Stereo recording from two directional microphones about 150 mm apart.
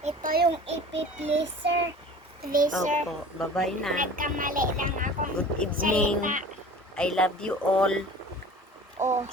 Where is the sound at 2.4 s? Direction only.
65° right (ahead or behind).